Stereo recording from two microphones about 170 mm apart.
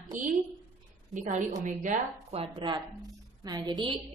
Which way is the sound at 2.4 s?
25° right (ahead or behind).